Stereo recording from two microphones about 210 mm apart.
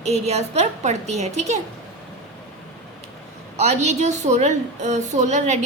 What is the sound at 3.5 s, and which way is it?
A woman's voice, 30° right (ahead or behind).